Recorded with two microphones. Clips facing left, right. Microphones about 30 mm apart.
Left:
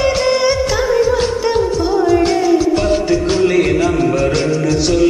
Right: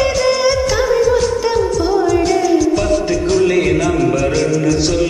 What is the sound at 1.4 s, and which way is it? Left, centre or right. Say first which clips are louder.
Music: even; centre.